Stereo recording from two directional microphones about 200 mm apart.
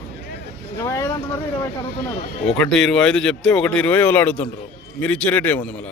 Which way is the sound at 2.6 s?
Centre (ahead or behind).